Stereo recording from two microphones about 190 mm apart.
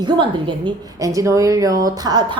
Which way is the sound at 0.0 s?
25° right (ahead or behind).